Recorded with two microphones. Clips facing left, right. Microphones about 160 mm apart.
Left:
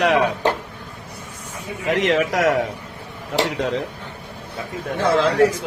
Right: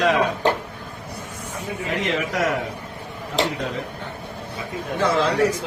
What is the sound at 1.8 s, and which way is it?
Speech, 75° left (ahead or behind).